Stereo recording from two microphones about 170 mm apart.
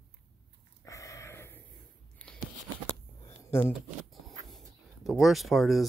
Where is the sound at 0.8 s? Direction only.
20° left (ahead or behind).